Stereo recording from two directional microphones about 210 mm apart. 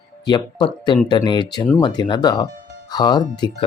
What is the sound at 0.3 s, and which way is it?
A man's voice, 20° left (ahead or behind).